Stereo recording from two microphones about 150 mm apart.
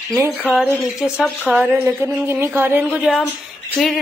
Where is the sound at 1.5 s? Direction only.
15° right (ahead or behind).